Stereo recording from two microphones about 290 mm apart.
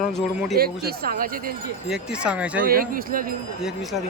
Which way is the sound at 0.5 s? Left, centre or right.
Right.